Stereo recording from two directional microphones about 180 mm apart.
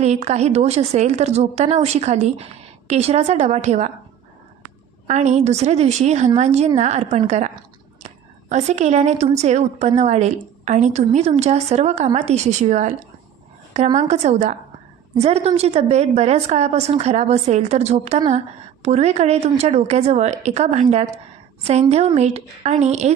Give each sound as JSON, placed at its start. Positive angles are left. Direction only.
{"t": 0.0, "sound": "a woman's voice", "side_deg": -35}
{"t": 5.0, "sound": "a woman's voice", "side_deg": -40}